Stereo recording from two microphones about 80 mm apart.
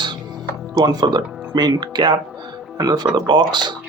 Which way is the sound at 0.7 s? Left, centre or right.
Right.